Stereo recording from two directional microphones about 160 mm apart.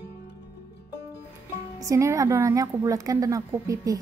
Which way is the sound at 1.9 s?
20° right (ahead or behind).